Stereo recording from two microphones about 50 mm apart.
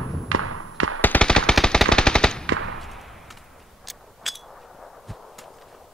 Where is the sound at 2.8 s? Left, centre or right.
Centre.